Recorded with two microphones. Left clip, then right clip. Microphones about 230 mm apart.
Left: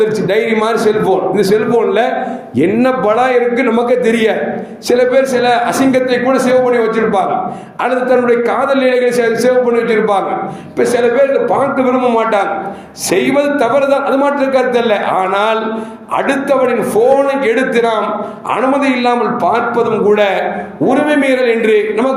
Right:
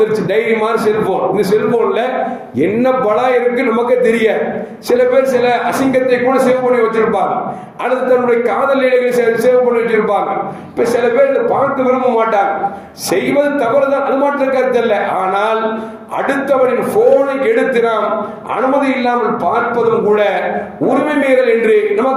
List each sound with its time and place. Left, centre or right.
0.0 s a man's voice: left
10.8 s a man's voice: left
12.0 s a man's voice: left